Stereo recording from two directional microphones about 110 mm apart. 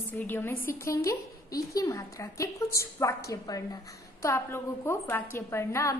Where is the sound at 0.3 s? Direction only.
20° left (ahead or behind).